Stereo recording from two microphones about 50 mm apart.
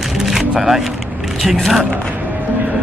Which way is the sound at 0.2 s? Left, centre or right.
Centre.